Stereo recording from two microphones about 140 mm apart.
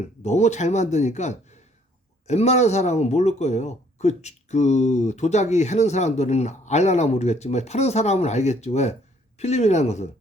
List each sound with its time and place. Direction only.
0.2 s a man's voice: 55° left (ahead or behind)